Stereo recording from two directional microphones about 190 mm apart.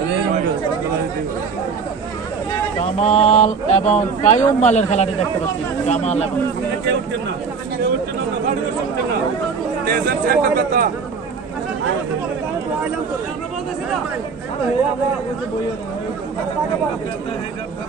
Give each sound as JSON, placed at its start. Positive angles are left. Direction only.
{"t": 3.0, "sound": "speech", "side_deg": 35}
{"t": 9.8, "sound": "a man's voice", "side_deg": -55}